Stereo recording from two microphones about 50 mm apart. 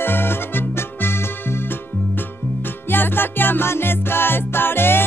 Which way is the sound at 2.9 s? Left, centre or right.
Left.